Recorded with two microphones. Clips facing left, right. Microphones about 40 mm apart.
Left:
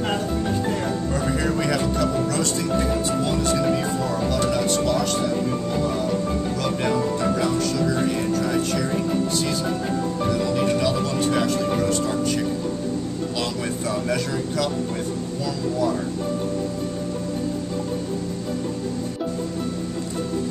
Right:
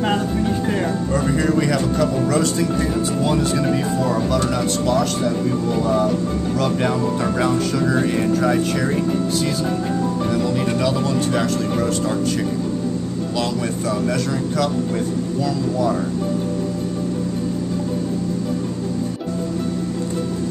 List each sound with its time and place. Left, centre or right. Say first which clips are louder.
1.1 s speech: right 6 dB; centre
4.3 s speech: right 2 dB; centre
13.4 s speech: right 5 dB; centre